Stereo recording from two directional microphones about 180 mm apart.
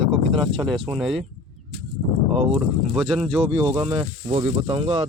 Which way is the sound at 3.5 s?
20° right (ahead or behind).